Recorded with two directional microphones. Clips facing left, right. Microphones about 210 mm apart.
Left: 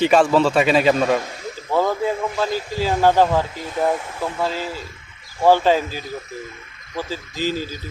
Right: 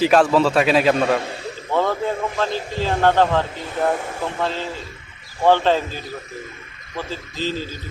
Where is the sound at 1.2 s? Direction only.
30° right (ahead or behind).